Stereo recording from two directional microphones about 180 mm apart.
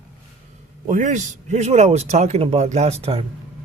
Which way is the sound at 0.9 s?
40° right (ahead or behind).